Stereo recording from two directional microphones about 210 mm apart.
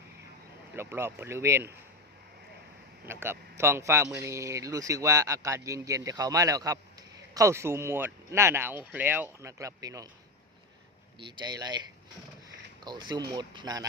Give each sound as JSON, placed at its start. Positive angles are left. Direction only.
{"t": 0.7, "sound": "a man's voice", "side_deg": -10}
{"t": 3.1, "sound": "a man's voice", "side_deg": -10}
{"t": 11.2, "sound": "speech", "side_deg": -20}
{"t": 12.8, "sound": "speech", "side_deg": -20}